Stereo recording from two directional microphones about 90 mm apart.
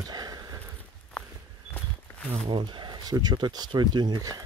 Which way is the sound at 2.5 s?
65° right (ahead or behind).